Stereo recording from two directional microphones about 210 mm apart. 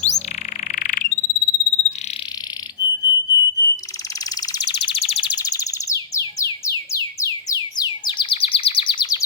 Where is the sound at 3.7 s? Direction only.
15° left (ahead or behind).